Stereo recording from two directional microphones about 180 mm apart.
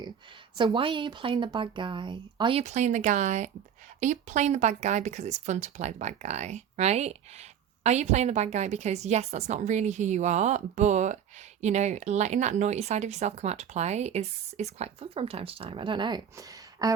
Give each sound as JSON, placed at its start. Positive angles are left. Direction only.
{"t": 0.5, "sound": "speech", "side_deg": -25}